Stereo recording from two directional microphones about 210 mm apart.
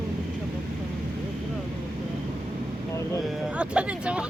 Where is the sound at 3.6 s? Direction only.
5° right (ahead or behind).